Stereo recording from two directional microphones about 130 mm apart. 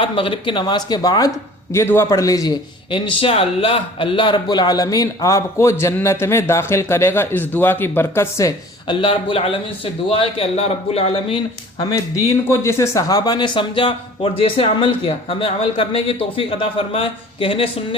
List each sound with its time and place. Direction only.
0.0 s speech: 45° left (ahead or behind)
1.7 s a man's voice: 20° left (ahead or behind)
2.9 s a man's voice: 45° left (ahead or behind); by 8.5 s 20° left (ahead or behind)
8.9 s speech: 40° left (ahead or behind)
11.8 s speech: 25° left (ahead or behind); by 17.7 s 45° left (ahead or behind)